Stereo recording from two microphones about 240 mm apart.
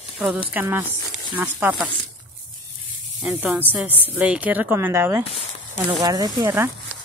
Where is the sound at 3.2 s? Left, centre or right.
Centre.